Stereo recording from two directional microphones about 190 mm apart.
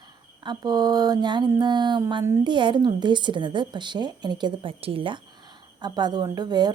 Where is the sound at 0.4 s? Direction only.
20° right (ahead or behind).